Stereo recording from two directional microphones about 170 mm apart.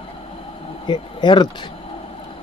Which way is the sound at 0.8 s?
25° left (ahead or behind).